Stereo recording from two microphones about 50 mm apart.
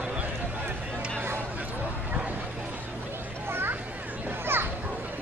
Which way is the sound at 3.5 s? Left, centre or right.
Right.